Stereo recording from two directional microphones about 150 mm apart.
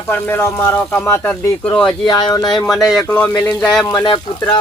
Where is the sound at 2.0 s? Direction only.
30° left (ahead or behind).